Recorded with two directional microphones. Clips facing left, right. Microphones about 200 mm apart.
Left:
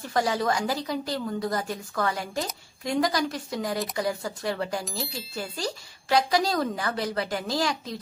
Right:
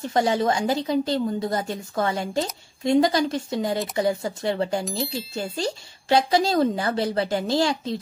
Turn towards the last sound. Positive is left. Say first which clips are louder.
# right 5 dB
turn(degrees=-25)  # may be behind; listen again after turning